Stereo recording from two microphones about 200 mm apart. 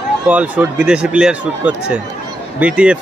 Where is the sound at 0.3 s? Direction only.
5° right (ahead or behind).